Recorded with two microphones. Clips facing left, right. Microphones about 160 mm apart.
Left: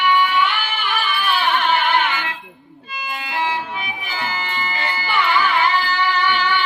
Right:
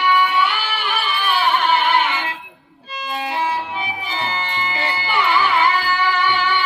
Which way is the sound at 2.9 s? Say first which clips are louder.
Right 2 dB; 30° right (ahead or behind).